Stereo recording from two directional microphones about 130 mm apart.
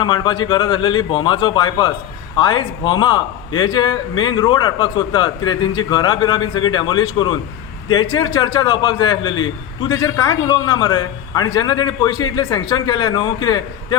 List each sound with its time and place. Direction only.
0.0 s a man's voice: 35° left (ahead or behind)